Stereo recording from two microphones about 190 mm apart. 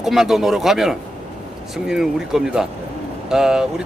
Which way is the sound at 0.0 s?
Centre (ahead or behind).